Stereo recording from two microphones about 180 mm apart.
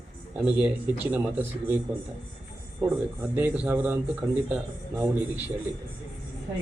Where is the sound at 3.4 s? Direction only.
10° right (ahead or behind).